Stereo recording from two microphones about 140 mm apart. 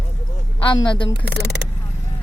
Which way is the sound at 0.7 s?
35° left (ahead or behind).